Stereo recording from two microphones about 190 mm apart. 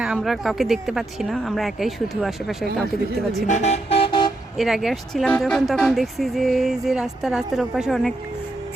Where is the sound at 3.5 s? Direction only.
35° left (ahead or behind).